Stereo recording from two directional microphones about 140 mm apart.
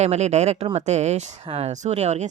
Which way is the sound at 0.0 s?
50° right (ahead or behind).